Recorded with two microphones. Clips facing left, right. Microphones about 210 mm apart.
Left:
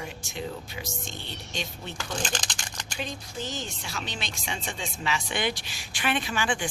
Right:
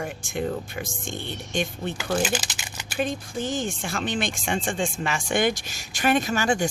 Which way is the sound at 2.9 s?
55° right (ahead or behind).